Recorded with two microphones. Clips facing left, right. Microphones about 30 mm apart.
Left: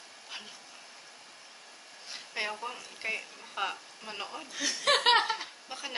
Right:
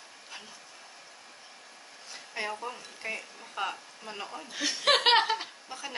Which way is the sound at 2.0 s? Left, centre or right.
Left.